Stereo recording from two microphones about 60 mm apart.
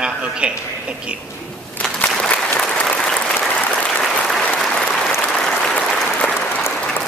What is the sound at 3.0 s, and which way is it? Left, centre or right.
Applause, centre.